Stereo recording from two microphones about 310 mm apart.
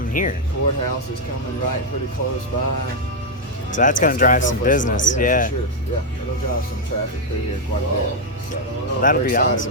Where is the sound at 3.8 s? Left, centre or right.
Left.